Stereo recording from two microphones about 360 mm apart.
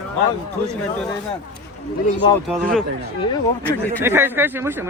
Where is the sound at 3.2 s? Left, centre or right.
Centre.